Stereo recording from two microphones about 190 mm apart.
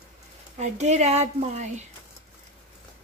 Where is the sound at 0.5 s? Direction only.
35° right (ahead or behind).